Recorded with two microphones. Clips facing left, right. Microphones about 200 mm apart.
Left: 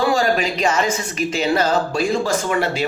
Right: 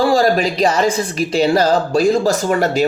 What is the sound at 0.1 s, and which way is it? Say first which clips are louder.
Speech: right 4 dB; 35° right (ahead or behind).